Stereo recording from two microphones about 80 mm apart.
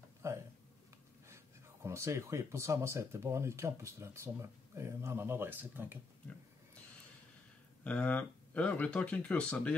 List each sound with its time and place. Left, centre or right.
0.2 s speech: right
7.8 s speech: centre